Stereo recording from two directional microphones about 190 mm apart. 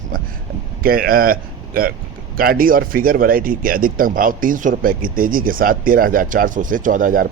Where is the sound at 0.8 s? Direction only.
50° right (ahead or behind).